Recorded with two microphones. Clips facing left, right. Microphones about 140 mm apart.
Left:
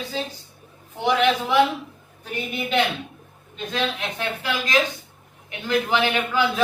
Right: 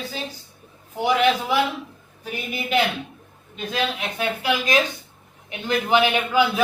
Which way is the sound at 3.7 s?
5° right (ahead or behind).